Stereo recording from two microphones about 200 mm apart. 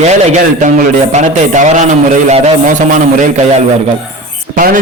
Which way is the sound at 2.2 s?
35° right (ahead or behind).